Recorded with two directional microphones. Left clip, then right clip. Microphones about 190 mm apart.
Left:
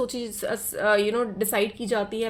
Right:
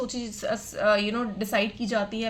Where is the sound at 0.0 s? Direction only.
45° left (ahead or behind).